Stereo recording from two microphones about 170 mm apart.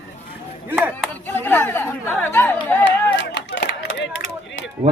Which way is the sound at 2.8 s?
90° left.